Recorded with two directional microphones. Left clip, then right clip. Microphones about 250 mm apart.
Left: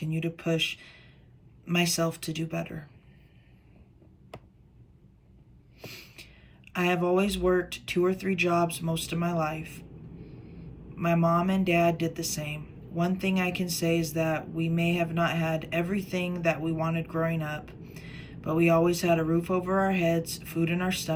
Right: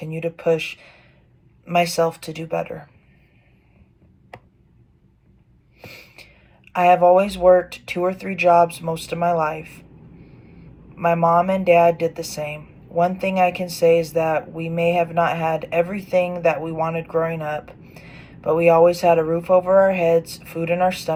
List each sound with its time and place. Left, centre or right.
0.2 s speech: centre
5.8 s snort: centre
6.9 s speech: centre
10.9 s speech: centre
18.1 s a sound: left
18.3 s speech: centre